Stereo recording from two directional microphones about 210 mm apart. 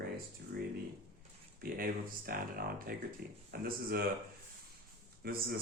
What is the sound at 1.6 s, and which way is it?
Speech, 45° right (ahead or behind).